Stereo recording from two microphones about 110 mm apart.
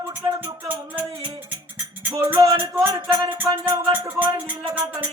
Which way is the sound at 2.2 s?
30° right (ahead or behind).